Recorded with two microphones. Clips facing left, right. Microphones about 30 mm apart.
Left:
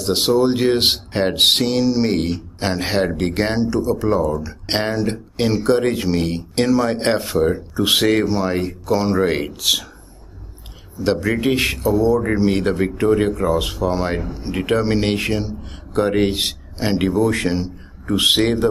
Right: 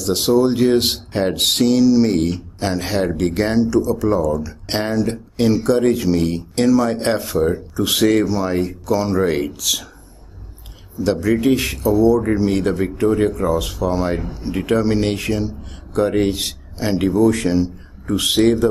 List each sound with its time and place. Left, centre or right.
0.0 s speech: left
11.0 s a man's voice: left